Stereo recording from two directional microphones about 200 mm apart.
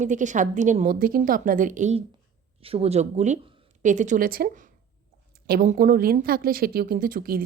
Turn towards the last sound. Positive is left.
turn(degrees=-45)  # may be behind; listen again after turning